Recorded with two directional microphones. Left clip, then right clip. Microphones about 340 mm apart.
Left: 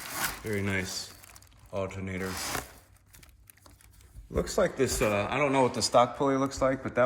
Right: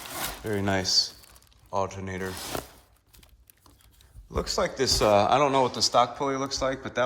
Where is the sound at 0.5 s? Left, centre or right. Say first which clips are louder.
Right 12 dB; centre.